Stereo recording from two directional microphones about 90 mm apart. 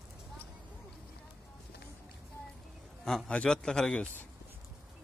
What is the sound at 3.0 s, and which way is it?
A man's voice, 5° left (ahead or behind).